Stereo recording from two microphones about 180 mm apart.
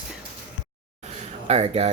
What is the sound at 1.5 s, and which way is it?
Speech, 35° right (ahead or behind).